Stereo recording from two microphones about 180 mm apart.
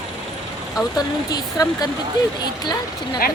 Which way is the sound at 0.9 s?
20° left (ahead or behind).